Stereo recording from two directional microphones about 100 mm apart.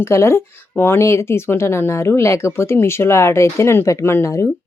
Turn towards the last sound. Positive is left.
turn(degrees=30)  # may be behind; listen again after turning